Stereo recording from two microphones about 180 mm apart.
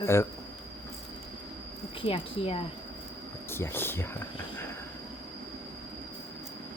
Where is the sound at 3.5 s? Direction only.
15° left (ahead or behind).